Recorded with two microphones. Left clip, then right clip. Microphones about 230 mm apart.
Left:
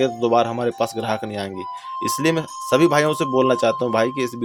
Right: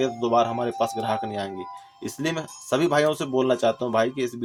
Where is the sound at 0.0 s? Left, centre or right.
Left.